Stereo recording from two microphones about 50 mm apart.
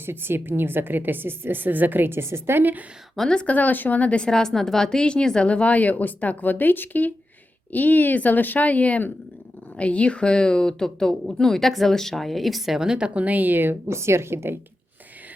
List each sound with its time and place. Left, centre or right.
0.0 s a woman's voice: right
2.1 s a woman's voice: right
3.2 s speech: centre
3.4 s speech: left; by 13.1 s centre
13.1 s speech: right
13.8 s a woman's voice: right